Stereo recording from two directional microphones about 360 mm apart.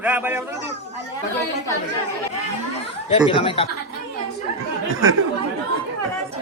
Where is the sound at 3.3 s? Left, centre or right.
Centre.